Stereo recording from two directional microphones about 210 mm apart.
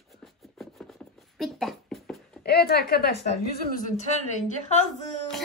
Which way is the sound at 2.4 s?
50° left (ahead or behind).